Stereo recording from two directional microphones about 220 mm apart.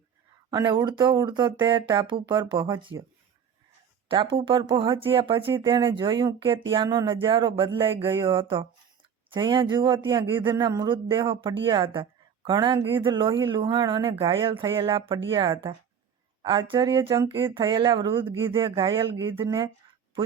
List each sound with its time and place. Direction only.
0.5 s a man's voice: 20° right (ahead or behind)
4.1 s a man's voice: 25° right (ahead or behind)